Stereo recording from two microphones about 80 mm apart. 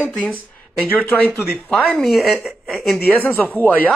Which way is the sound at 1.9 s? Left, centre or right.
Centre.